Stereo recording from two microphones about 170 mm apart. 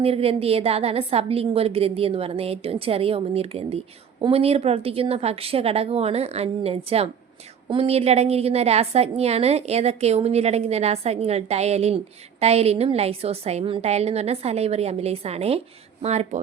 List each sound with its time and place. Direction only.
0.0 s a woman's voice: 35° right (ahead or behind)